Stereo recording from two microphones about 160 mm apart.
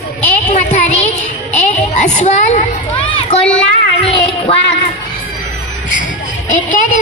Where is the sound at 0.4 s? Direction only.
45° left (ahead or behind).